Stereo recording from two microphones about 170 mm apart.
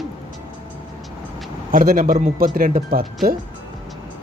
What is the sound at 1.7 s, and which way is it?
Speech, 55° right (ahead or behind).